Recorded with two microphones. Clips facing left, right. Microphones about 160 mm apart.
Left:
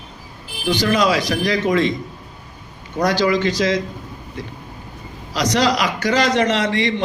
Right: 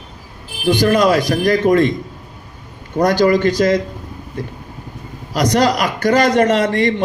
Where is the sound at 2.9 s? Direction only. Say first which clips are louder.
Right 4 dB; 50° right (ahead or behind).